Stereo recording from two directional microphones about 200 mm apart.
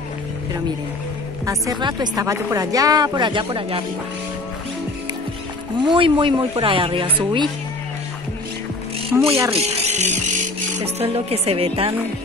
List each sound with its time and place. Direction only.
1.4 s speech: 20° right (ahead or behind)
5.9 s speech: 25° right (ahead or behind)
9.1 s speech: 10° right (ahead or behind)
9.5 s a woman's voice: 35° right (ahead or behind)